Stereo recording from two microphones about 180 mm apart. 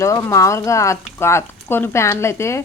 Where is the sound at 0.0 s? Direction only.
20° left (ahead or behind).